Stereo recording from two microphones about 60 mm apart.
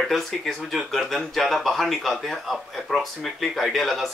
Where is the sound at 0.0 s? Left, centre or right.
Centre.